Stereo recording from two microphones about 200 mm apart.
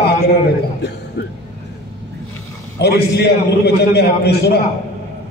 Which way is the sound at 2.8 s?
55° left (ahead or behind).